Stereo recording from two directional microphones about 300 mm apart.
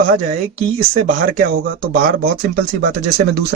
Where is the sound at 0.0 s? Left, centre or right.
Right.